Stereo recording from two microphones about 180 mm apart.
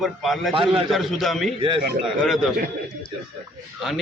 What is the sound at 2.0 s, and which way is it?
Speech, centre (ahead or behind).